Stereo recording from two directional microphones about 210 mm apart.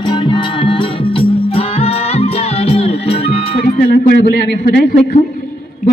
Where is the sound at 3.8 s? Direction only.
40° left (ahead or behind).